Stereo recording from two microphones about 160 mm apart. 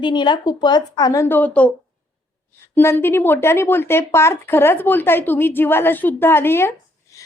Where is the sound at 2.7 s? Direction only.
15° left (ahead or behind).